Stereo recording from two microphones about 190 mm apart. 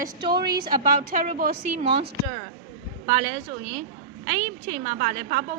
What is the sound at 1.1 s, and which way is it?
Speech, 45° right (ahead or behind).